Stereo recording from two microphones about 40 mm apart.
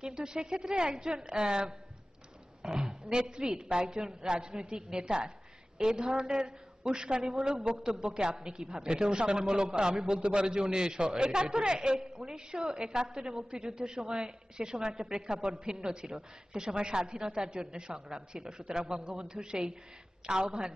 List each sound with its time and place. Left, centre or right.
0.0 s a woman's voice: centre
2.6 s oink: centre
2.9 s a woman's voice: right
15.3 s a woman's voice: right
15.6 s a woman's voice: right